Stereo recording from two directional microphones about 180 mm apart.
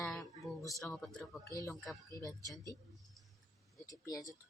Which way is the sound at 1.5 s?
15° left (ahead or behind).